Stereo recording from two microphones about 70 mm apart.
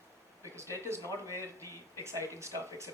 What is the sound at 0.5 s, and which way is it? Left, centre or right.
Speech, right.